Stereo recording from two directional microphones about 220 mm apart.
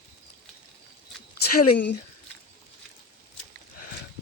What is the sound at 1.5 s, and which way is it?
Speech, 90° left.